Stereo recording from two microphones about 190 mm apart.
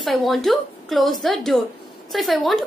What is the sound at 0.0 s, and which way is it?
A woman's voice, centre (ahead or behind).